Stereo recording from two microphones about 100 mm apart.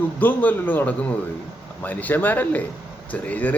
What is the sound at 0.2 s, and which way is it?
A man's voice, 20° left (ahead or behind).